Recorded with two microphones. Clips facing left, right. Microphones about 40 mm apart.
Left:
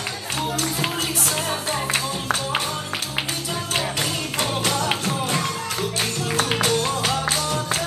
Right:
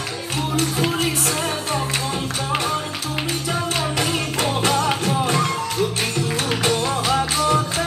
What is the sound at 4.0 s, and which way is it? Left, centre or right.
Music, right.